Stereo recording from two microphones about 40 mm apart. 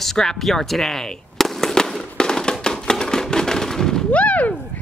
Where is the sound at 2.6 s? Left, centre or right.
Centre.